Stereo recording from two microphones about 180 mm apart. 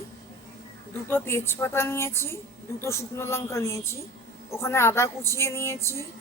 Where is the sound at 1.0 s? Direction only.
15° left (ahead or behind).